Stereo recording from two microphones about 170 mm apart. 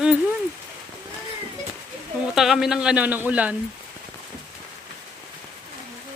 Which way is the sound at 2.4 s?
Centre (ahead or behind).